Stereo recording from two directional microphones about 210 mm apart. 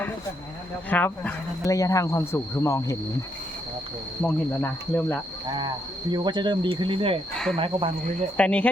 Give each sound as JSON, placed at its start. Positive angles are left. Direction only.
{"t": 0.9, "sound": "speech", "side_deg": 5}
{"t": 4.2, "sound": "speech", "side_deg": 10}
{"t": 5.5, "sound": "speech", "side_deg": -20}
{"t": 8.4, "sound": "speech", "side_deg": 5}